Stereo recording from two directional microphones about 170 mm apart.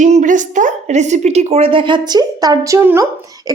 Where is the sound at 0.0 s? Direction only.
45° right (ahead or behind).